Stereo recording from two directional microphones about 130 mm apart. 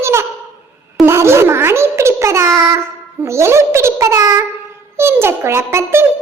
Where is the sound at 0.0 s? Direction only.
20° right (ahead or behind).